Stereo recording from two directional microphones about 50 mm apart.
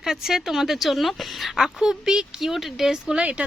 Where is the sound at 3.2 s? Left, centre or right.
Right.